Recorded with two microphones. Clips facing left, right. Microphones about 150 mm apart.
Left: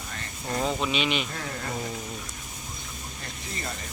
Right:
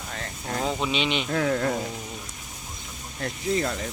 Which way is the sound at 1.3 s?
75° right (ahead or behind).